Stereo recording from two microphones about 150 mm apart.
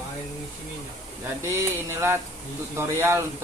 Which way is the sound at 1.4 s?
20° right (ahead or behind).